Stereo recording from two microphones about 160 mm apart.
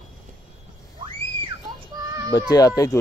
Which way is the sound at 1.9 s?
20° right (ahead or behind).